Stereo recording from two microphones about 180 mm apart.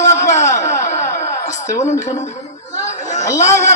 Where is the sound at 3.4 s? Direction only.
40° left (ahead or behind).